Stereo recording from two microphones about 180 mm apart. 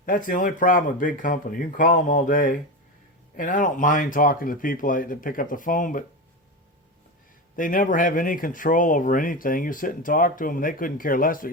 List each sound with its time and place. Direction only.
0.0 s speech: 50° left (ahead or behind)
7.5 s speech: 50° left (ahead or behind)